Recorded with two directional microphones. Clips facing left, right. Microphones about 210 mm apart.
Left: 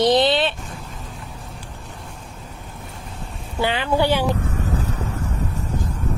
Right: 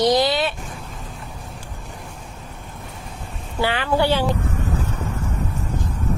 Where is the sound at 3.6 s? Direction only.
20° left (ahead or behind).